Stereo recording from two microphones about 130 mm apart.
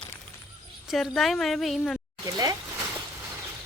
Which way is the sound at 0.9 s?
Centre (ahead or behind).